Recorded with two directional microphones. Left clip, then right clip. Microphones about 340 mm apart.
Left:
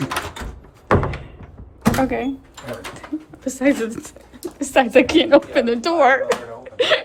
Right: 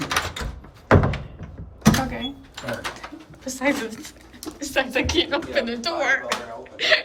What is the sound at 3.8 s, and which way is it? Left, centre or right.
Speech, centre.